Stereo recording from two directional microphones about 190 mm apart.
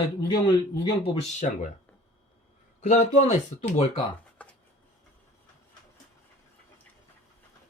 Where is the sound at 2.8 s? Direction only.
35° left (ahead or behind).